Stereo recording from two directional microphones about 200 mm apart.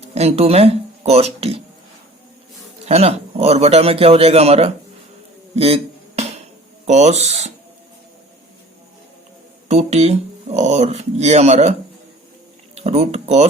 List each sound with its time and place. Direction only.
0.1 s speech: 30° right (ahead or behind)
2.8 s speech: 30° right (ahead or behind)
5.5 s a sound: 30° right (ahead or behind)
6.8 s speech: 35° right (ahead or behind)
9.6 s speech: 35° right (ahead or behind)
12.7 s speech: 30° right (ahead or behind)